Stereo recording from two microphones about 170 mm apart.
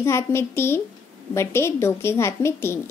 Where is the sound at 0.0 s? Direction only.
15° left (ahead or behind).